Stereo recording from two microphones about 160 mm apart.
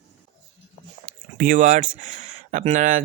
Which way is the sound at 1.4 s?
55° right (ahead or behind).